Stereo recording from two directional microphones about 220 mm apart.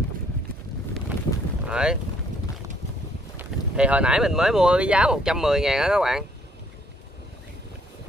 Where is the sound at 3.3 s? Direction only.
5° right (ahead or behind).